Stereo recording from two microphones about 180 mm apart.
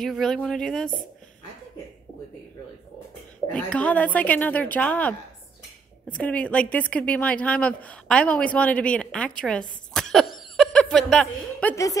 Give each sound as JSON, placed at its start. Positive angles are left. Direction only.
{"t": 0.0, "sound": "speech", "side_deg": 0}
{"t": 3.5, "sound": "a woman's voice", "side_deg": 5}
{"t": 11.7, "sound": "a woman's voice", "side_deg": 20}